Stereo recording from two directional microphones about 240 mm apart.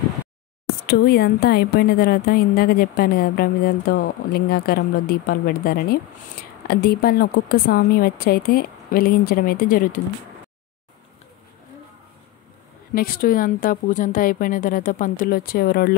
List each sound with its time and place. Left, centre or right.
0.8 s a woman's voice: left
12.9 s a woman's voice: left